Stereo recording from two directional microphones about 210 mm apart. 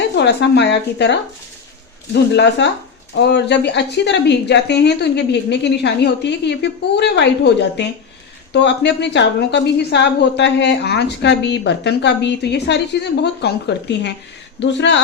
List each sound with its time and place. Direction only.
0.2 s a woman's voice: 55° left (ahead or behind)